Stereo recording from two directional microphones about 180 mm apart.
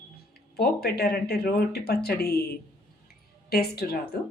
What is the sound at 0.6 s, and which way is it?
Speech, 65° left (ahead or behind).